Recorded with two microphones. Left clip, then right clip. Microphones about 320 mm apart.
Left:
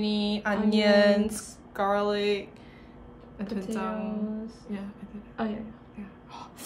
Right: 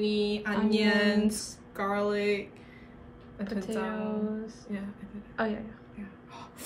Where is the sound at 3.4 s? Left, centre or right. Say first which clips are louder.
Even; centre.